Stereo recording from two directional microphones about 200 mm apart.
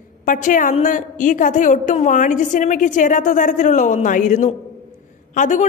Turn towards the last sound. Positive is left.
turn(degrees=40)  # may be behind; listen again after turning